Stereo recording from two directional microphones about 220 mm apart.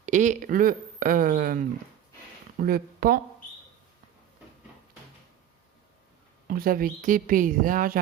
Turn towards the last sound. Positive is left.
turn(degrees=-40)  # may be behind; listen again after turning